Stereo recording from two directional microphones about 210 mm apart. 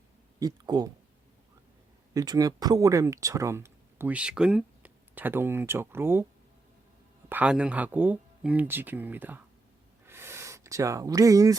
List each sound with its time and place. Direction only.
0.3 s speech: 20° right (ahead or behind)
2.1 s speech: 15° right (ahead or behind)
7.3 s speech: 5° right (ahead or behind)
10.1 s a sound: 10° right (ahead or behind)